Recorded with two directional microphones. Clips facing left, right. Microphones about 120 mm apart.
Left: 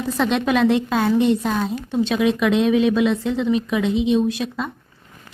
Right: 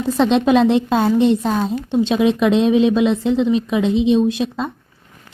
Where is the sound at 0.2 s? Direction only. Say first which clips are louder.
Right 5 dB; 25° right (ahead or behind).